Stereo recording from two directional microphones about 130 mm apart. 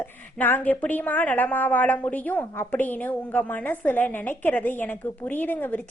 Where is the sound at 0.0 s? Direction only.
15° left (ahead or behind).